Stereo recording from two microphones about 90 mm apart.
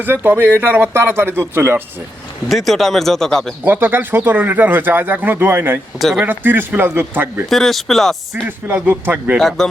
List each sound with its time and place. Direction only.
0.0 s speech: 25° right (ahead or behind)
2.5 s speech: centre (ahead or behind)
3.6 s speech: 20° right (ahead or behind)
7.5 s speech: centre (ahead or behind)
8.4 s speech: 20° right (ahead or behind)
9.4 s speech: 5° left (ahead or behind)